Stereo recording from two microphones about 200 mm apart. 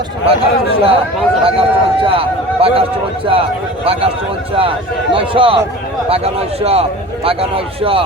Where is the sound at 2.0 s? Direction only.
30° right (ahead or behind).